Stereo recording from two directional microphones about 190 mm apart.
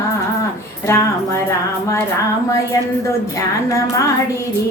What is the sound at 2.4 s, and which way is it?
Music, 15° left (ahead or behind).